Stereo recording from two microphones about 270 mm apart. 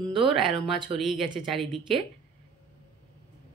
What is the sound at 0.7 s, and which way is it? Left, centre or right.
Speech, centre.